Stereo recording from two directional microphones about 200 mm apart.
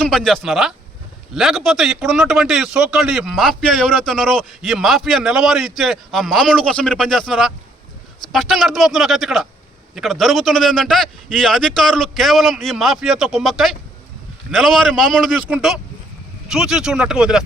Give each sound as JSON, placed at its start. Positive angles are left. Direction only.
{"t": 0.0, "sound": "a man's voice", "side_deg": 5}